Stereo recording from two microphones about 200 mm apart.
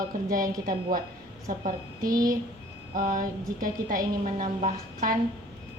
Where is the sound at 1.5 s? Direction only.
40° right (ahead or behind).